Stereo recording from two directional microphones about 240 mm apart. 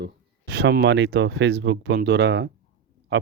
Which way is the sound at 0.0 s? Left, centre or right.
Right.